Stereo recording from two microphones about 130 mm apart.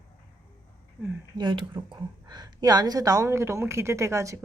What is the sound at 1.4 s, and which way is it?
A woman's voice, 35° right (ahead or behind).